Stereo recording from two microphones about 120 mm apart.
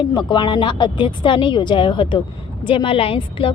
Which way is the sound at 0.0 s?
35° left (ahead or behind).